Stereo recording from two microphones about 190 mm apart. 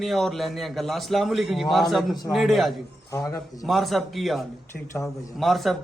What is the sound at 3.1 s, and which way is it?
Speech, 20° left (ahead or behind).